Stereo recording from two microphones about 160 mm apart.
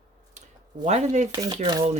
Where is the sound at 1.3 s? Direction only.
25° right (ahead or behind).